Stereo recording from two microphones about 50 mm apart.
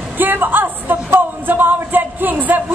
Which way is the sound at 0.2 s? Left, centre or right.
Right.